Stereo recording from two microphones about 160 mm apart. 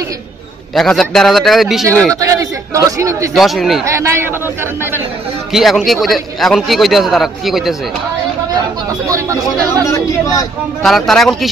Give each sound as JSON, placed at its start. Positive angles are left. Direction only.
{"t": 0.7, "sound": "speech", "side_deg": 5}
{"t": 2.1, "sound": "a man's voice", "side_deg": -20}
{"t": 3.3, "sound": "speech", "side_deg": 0}
{"t": 3.8, "sound": "speech", "side_deg": -15}
{"t": 5.5, "sound": "speech", "side_deg": 0}
{"t": 9.1, "sound": "a man's voice", "side_deg": -20}
{"t": 9.8, "sound": "speech", "side_deg": 20}
{"t": 10.8, "sound": "speech", "side_deg": 0}